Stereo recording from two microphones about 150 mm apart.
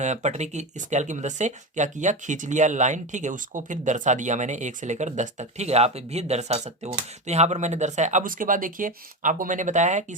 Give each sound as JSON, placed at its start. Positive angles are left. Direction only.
{"t": 0.0, "sound": "speech", "side_deg": -50}